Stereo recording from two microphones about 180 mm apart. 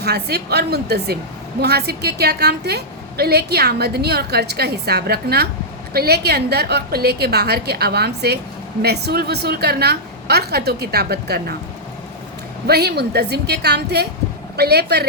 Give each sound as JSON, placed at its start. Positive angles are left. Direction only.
{"t": 0.0, "sound": "a woman's voice", "side_deg": -65}
{"t": 12.6, "sound": "a woman's voice", "side_deg": -60}